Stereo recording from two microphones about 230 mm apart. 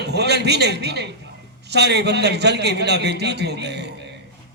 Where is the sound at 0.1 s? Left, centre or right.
Right.